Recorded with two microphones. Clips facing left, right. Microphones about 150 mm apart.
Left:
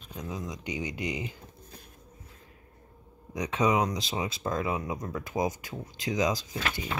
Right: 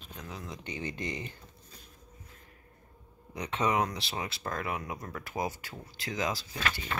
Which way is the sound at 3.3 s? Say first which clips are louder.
Left 4 dB; 15° left (ahead or behind).